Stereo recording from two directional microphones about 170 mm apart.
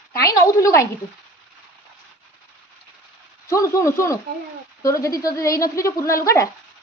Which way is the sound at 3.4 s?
20° left (ahead or behind).